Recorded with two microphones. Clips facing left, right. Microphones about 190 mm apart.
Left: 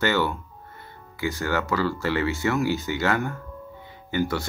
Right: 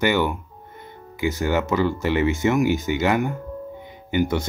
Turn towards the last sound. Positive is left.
turn(degrees=-20)  # may be behind; listen again after turning